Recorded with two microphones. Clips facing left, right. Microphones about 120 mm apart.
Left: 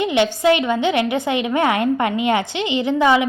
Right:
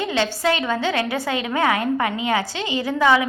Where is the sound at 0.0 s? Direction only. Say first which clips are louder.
Left 5 dB; 20° left (ahead or behind).